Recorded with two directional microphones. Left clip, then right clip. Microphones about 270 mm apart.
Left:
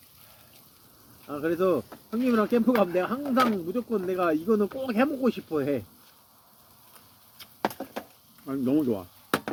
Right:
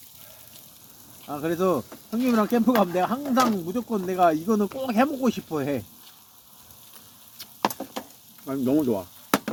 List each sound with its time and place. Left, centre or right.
1.3 s speech: right
7.6 s a sound: centre
8.4 s speech: centre